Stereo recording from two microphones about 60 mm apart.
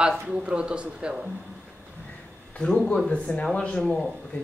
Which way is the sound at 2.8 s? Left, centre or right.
Centre.